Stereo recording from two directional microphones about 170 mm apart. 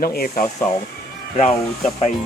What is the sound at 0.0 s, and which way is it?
Speech, 60° left (ahead or behind).